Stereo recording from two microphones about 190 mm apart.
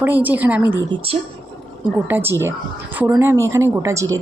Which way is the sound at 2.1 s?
10° right (ahead or behind).